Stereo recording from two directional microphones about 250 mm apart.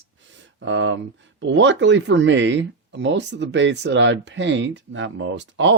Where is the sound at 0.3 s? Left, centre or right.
Right.